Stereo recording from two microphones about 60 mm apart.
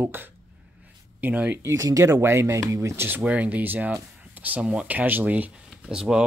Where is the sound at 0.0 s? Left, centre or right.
Right.